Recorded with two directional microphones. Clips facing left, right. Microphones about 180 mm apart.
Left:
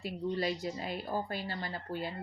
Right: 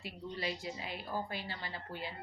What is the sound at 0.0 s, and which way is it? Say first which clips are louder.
Speech: left 7 dB; 45° left (ahead or behind).